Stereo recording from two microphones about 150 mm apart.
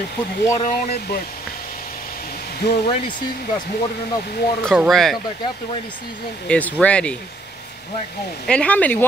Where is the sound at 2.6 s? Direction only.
90° left.